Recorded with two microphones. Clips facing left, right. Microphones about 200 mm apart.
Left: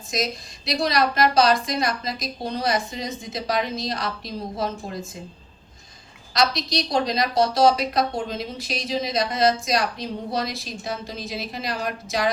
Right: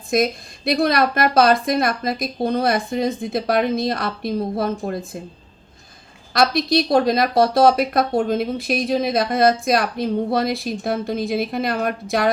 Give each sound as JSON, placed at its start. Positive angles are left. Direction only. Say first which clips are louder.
{"t": 0.1, "sound": "speech", "louder": "right 8 dB", "side_deg": -55}
{"t": 6.3, "sound": "speech", "louder": "right 6 dB", "side_deg": -55}